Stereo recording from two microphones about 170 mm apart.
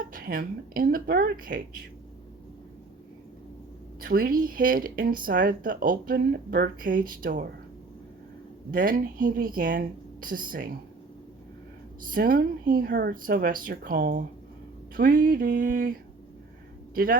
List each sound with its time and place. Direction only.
0.1 s speech: 55° right (ahead or behind)
4.0 s speech: 60° right (ahead or behind)
8.7 s speech: 55° right (ahead or behind)
12.1 s speech: 55° right (ahead or behind)